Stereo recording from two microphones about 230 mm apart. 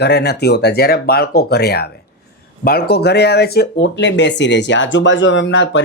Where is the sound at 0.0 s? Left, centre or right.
Left.